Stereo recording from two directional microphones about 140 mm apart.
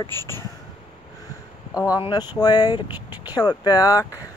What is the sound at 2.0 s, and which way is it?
Speech, 30° left (ahead or behind).